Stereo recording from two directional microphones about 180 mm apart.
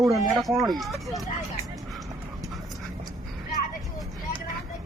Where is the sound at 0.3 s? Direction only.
Centre (ahead or behind).